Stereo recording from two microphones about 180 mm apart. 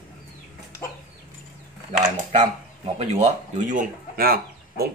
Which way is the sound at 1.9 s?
35° right (ahead or behind).